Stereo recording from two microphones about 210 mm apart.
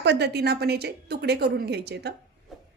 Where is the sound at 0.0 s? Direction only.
55° right (ahead or behind).